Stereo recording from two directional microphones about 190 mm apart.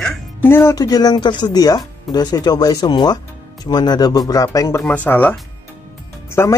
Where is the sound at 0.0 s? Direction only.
10° left (ahead or behind).